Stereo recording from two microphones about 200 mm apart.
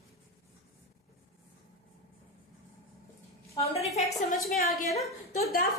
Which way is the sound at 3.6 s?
30° left (ahead or behind).